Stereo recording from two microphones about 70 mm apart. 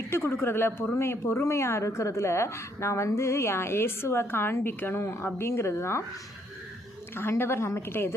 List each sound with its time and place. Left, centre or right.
0.1 s speech: left
7.2 s speech: left